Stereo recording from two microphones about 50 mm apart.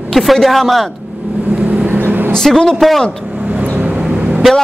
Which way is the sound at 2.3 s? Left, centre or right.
Centre.